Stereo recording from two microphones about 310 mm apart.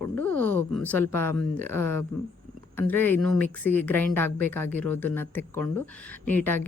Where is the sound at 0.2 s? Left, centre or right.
Centre.